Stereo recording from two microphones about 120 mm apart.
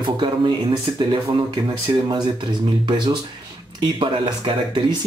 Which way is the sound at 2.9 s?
40° right (ahead or behind).